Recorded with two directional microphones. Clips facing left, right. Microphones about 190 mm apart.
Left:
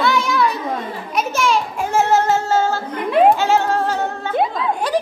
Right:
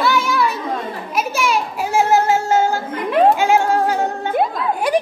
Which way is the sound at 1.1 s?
10° right (ahead or behind).